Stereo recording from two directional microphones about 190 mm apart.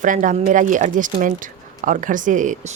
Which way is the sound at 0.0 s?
40° right (ahead or behind).